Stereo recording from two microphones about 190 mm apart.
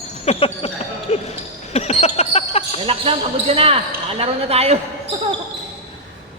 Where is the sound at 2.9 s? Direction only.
30° right (ahead or behind).